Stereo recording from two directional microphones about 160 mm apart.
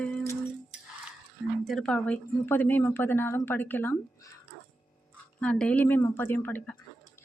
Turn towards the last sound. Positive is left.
turn(degrees=10)  # may be behind; listen again after turning